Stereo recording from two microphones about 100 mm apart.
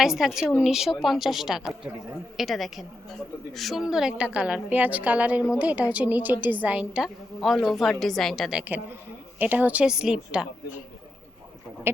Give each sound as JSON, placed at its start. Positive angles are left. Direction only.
{"t": 0.0, "sound": "a woman's voice", "side_deg": -5}
{"t": 8.5, "sound": "a woman's voice", "side_deg": -15}